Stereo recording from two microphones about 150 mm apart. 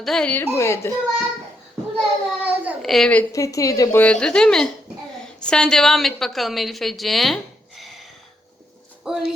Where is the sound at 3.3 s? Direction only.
20° left (ahead or behind).